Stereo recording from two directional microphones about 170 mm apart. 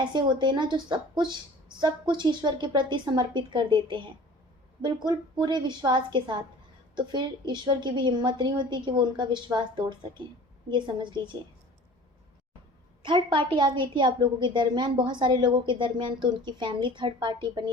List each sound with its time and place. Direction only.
0.0 s a woman's voice: 25° right (ahead or behind)
13.0 s a woman's voice: 30° right (ahead or behind)